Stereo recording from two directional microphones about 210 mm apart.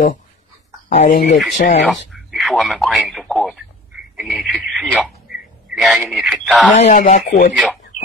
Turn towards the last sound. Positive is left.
turn(degrees=40)  # may be behind; listen again after turning